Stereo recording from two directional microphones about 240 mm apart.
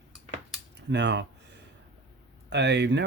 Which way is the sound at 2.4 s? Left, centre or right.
Right.